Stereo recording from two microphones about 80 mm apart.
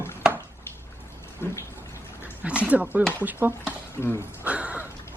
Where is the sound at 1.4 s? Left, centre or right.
Left.